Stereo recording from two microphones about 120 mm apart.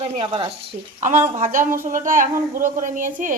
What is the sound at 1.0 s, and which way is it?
A woman's voice, 90° right.